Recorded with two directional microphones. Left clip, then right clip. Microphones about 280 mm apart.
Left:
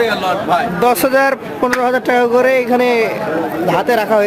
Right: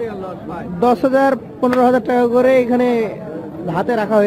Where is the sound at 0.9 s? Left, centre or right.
Centre.